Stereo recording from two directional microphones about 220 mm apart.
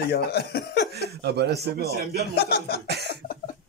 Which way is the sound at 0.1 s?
45° left (ahead or behind).